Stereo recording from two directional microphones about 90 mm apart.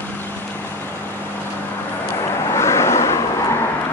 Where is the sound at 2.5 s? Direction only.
30° left (ahead or behind).